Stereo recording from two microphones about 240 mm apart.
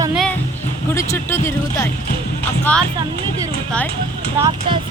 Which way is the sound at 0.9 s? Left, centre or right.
Centre.